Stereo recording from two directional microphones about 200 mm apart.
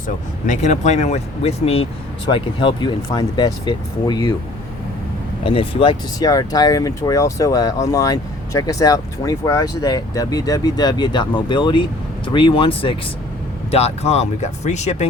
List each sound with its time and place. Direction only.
0.4 s speech: 35° left (ahead or behind); by 4.4 s 20° left (ahead or behind)
5.4 s speech: 30° left (ahead or behind)